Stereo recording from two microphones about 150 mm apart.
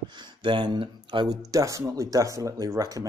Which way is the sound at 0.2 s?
30° right (ahead or behind).